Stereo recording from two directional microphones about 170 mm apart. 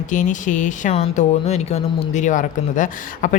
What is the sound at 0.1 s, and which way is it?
A woman's voice, 45° left (ahead or behind).